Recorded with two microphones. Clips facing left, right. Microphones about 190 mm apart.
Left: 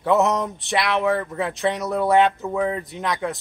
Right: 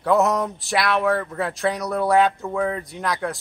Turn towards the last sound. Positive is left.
turn(degrees=0)  # may be behind; listen again after turning